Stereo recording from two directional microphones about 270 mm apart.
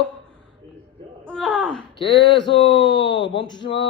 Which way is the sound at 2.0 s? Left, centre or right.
Left.